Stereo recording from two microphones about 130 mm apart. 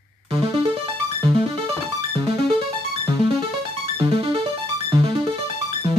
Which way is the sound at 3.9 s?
45° right (ahead or behind).